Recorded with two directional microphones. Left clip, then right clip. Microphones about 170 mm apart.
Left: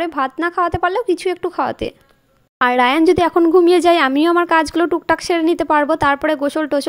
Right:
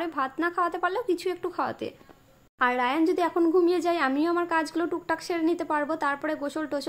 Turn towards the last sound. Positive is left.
turn(degrees=45)  # may be behind; listen again after turning